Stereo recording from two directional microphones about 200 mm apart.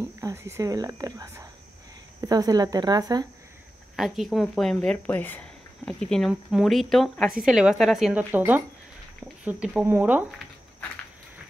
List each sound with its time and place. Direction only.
0.2 s speech: 15° right (ahead or behind)
3.9 s speech: centre (ahead or behind)